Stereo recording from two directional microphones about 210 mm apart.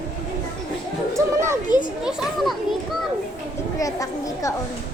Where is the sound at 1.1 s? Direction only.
15° right (ahead or behind).